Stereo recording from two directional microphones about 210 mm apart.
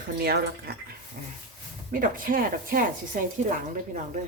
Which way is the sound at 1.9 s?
40° right (ahead or behind).